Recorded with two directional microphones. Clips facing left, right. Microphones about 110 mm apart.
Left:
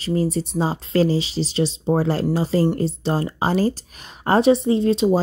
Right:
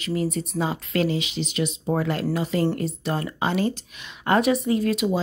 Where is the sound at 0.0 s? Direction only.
30° left (ahead or behind).